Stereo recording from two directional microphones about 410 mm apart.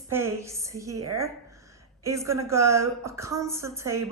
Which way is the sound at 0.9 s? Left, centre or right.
Right.